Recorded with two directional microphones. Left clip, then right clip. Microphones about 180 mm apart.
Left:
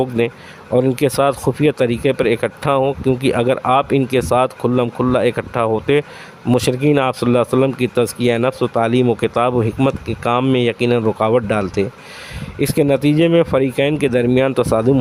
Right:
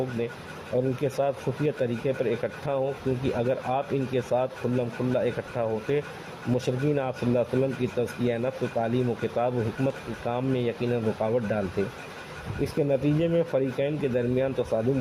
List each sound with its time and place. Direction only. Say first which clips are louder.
0.8 s speech: left 11 dB; 50° left (ahead or behind)